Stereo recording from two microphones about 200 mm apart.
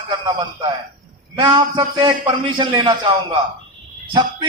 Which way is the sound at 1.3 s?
25° right (ahead or behind).